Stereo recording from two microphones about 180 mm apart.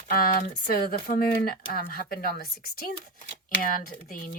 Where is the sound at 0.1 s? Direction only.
55° left (ahead or behind).